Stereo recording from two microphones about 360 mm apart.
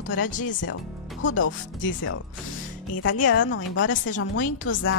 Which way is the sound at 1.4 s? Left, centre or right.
Left.